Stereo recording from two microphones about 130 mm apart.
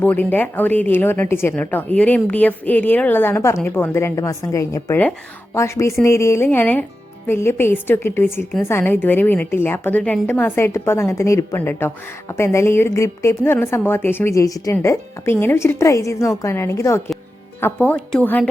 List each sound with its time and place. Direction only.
0.0 s a woman's voice: 15° left (ahead or behind)